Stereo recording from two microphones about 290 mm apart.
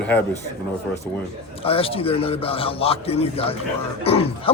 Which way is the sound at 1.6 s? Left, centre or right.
Centre.